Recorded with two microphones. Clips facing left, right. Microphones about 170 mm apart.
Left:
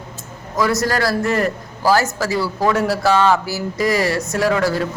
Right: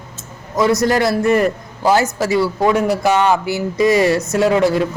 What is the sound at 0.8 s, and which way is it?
A man's voice, 20° right (ahead or behind).